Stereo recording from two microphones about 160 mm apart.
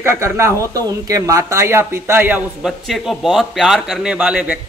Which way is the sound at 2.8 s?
Centre (ahead or behind).